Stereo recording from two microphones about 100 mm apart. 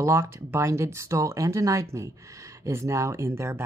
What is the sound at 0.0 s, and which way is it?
Speech, 25° right (ahead or behind).